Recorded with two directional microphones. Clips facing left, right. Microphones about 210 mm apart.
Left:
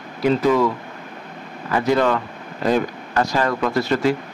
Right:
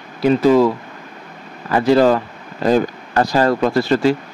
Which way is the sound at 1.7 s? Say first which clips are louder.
Right 5 dB; 35° right (ahead or behind).